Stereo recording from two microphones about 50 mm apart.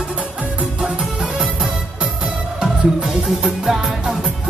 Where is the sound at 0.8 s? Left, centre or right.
Centre.